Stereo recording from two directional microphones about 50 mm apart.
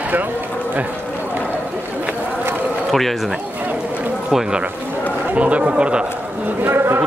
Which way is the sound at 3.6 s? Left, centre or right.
Right.